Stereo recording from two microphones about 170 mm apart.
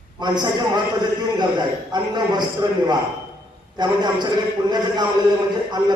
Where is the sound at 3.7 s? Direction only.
25° right (ahead or behind).